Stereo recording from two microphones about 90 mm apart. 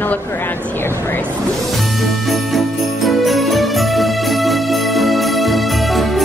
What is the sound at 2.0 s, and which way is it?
Music, centre (ahead or behind).